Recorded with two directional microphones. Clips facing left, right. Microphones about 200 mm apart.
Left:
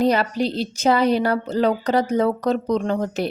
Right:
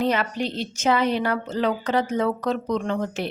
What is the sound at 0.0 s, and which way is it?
A woman's voice, 35° left (ahead or behind).